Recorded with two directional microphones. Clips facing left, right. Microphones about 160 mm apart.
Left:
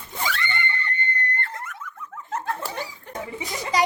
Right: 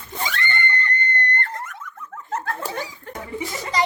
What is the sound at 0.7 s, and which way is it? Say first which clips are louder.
Screaming: right 4 dB; 5° left (ahead or behind).